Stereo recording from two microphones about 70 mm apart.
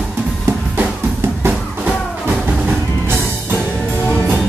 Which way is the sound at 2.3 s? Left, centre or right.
Right.